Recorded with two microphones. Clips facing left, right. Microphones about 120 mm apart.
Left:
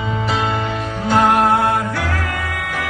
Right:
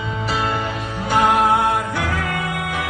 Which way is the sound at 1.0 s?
15° right (ahead or behind).